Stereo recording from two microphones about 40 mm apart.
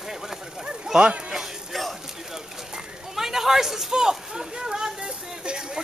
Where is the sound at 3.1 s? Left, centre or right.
Centre.